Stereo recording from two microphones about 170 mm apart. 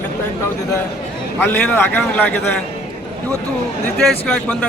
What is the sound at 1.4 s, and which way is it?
A man's voice, 10° left (ahead or behind).